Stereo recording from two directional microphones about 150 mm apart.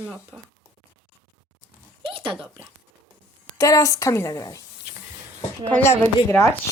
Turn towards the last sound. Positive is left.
turn(degrees=15)  # may be behind; listen again after turning